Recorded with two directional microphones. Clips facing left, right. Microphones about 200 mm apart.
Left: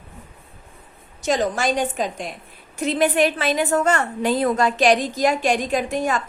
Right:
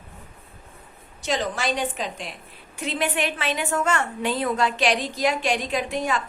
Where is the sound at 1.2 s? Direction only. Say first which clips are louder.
Left 5 dB; 45° left (ahead or behind).